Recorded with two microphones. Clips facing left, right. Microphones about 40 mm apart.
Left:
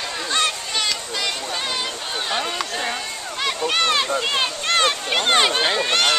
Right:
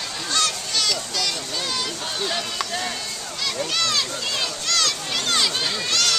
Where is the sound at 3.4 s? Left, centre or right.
Left.